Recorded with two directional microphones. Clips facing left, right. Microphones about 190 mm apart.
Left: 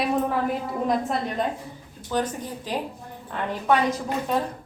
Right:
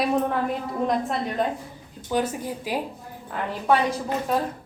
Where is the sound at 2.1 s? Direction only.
10° right (ahead or behind).